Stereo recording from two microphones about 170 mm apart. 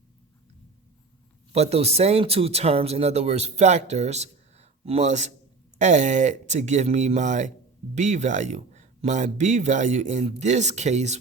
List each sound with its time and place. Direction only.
1.5 s speech: 40° right (ahead or behind)